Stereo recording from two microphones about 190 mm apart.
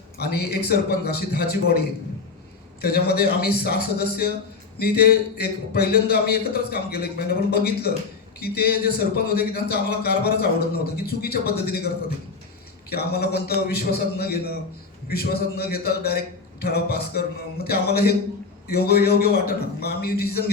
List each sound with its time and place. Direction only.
0.2 s a man's voice: 55° left (ahead or behind)
2.8 s a man's voice: 55° left (ahead or behind)
12.9 s a man's voice: 55° left (ahead or behind)